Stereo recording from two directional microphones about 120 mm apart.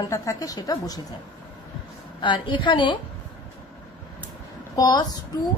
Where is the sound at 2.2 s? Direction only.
40° left (ahead or behind).